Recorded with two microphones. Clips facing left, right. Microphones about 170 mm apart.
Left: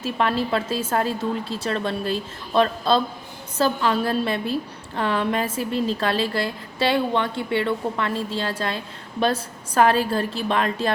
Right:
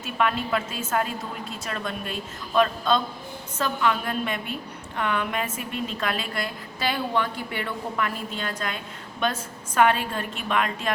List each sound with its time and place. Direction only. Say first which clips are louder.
0.0 s a woman's voice: left 3 dB; 30° left (ahead or behind)